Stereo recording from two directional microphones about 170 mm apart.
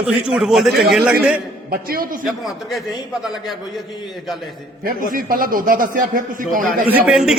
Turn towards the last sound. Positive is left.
turn(degrees=-5)  # may be behind; listen again after turning